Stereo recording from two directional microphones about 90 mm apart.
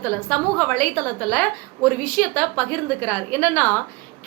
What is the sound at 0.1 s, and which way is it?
A woman's voice, 15° left (ahead or behind).